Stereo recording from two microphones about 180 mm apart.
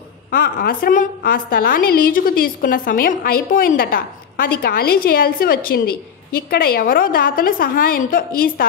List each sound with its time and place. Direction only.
0.3 s a woman's voice: 55° left (ahead or behind)